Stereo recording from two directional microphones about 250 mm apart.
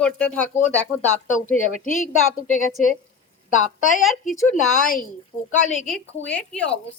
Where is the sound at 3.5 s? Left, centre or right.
Left.